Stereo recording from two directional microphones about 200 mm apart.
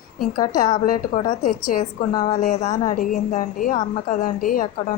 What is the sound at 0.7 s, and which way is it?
A woman's voice, 45° left (ahead or behind).